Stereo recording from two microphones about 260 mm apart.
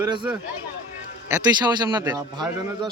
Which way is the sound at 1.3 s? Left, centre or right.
Centre.